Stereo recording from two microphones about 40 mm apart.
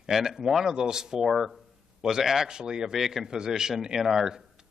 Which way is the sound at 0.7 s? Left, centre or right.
Centre.